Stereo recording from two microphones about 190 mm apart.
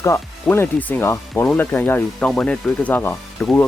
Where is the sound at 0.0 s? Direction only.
15° left (ahead or behind).